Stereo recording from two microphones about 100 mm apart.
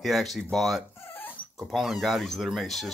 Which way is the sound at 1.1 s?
20° left (ahead or behind).